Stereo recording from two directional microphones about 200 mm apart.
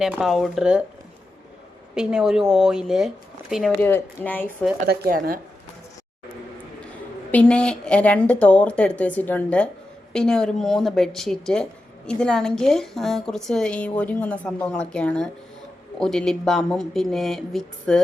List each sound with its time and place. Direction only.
0.0 s a woman's voice: centre (ahead or behind)
2.0 s a woman's voice: 5° right (ahead or behind)
4.9 s speech: 45° right (ahead or behind)
7.3 s a woman's voice: 5° left (ahead or behind)